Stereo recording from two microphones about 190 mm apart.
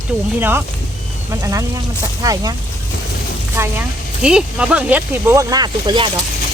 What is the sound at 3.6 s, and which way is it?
Speech, 10° right (ahead or behind).